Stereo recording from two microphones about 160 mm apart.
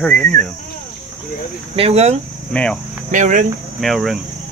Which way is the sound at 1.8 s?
40° right (ahead or behind).